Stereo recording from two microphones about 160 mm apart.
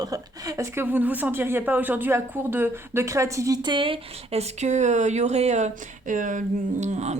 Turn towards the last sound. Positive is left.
turn(degrees=-45)  # may be behind; listen again after turning